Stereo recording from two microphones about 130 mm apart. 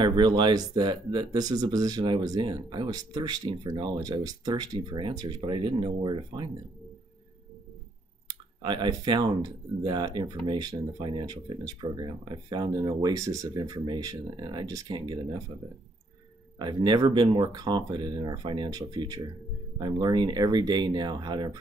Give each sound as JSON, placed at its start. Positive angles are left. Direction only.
{"t": 0.0, "sound": "speech", "side_deg": -35}
{"t": 8.3, "sound": "speech", "side_deg": -35}
{"t": 16.5, "sound": "speech", "side_deg": -35}